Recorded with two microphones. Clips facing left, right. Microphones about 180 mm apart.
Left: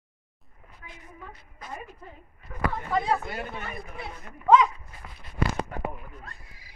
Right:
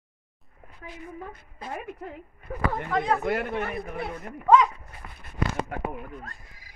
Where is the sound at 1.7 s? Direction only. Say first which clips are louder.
Right 6 dB; 60° right (ahead or behind).